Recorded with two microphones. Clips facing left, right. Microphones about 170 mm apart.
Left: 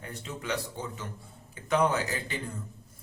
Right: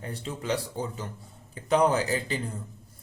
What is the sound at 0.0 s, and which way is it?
Speech, 30° right (ahead or behind).